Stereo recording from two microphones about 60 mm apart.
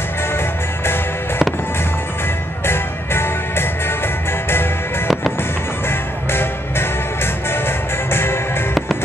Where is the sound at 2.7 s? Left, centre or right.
Left.